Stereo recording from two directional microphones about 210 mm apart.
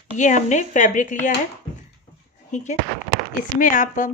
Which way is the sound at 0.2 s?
35° left (ahead or behind).